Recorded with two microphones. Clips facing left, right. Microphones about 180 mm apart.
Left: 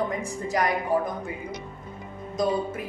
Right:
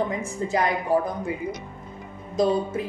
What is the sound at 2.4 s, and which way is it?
Speech, 25° right (ahead or behind).